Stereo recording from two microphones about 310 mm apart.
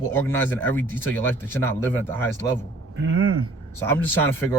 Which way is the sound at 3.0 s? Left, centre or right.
Right.